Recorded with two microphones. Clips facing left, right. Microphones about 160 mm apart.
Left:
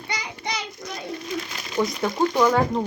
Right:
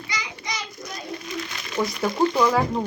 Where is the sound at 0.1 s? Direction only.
60° left (ahead or behind).